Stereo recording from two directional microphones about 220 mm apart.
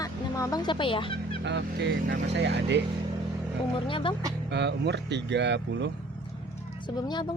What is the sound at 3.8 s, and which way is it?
Speech, 25° left (ahead or behind).